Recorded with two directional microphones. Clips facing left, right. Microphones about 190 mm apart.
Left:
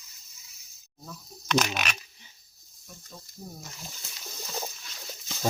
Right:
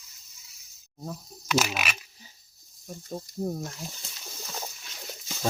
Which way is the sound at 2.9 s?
45° right (ahead or behind).